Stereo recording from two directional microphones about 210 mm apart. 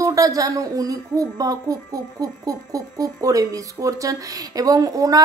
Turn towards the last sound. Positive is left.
turn(degrees=-15)  # may be behind; listen again after turning